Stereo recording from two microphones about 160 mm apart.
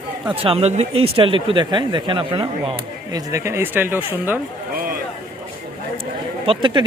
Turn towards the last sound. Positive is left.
turn(degrees=-35)  # may be behind; listen again after turning